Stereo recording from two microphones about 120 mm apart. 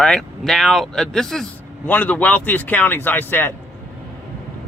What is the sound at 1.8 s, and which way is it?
Speech, 15° left (ahead or behind).